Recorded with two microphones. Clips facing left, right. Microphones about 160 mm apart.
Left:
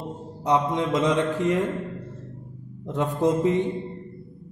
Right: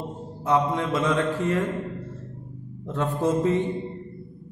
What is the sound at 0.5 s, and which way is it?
A man's voice, 20° left (ahead or behind).